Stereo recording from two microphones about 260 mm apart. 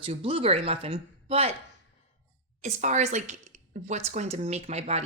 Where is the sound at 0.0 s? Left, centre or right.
Right.